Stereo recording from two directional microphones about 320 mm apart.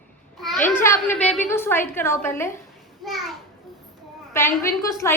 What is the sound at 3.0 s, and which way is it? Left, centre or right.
Children playing, centre.